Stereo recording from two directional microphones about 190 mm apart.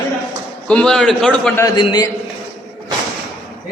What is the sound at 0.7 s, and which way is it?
Speech, 5° left (ahead or behind).